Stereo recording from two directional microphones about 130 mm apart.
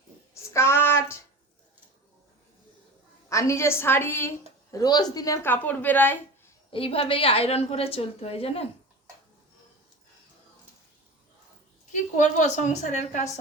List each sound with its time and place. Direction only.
0.5 s a sound: 20° left (ahead or behind)
3.2 s a woman's voice: 25° left (ahead or behind)
6.7 s a woman's voice: 45° left (ahead or behind)
12.2 s a woman's voice: 70° left (ahead or behind)